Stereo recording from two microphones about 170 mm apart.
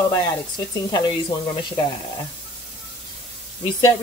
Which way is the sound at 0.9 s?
30° left (ahead or behind).